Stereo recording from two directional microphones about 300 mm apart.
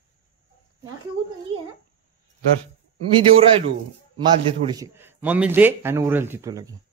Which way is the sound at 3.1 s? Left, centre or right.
Centre.